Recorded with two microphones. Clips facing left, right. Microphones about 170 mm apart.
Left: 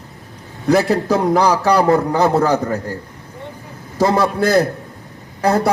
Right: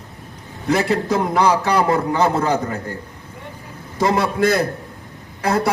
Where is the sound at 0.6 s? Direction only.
40° left (ahead or behind).